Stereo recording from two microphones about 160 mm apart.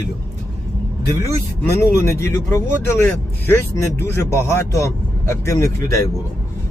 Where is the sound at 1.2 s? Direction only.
90° left.